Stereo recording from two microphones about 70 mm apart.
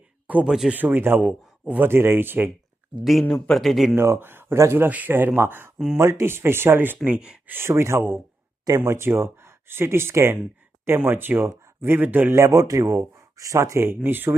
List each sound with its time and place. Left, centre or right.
0.4 s speech: centre
0.7 s speech: right
1.2 s a man's voice: centre
1.9 s speech: right
3.0 s speech: centre
3.9 s speech: right
4.9 s speech: right
7.0 s speech: centre
7.4 s speech: right
8.6 s speech: right
8.9 s speech: right
11.0 s speech: right
12.4 s speech: right